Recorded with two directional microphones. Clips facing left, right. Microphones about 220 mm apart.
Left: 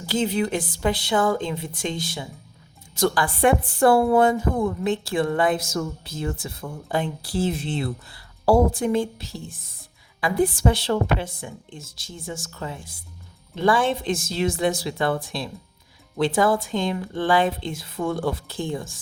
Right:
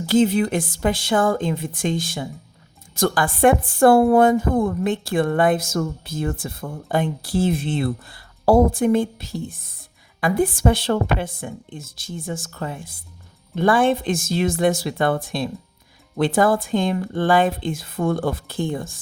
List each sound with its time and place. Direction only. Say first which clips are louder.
0.0 s a woman's voice: right 6 dB; 55° right (ahead or behind)